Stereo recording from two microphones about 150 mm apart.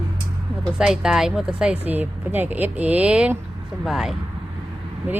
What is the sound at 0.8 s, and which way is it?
Speech, 5° right (ahead or behind).